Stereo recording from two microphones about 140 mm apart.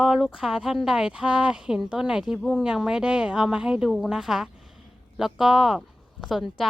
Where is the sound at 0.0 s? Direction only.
5° right (ahead or behind).